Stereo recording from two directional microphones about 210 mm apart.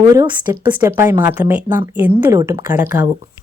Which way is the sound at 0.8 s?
10° right (ahead or behind).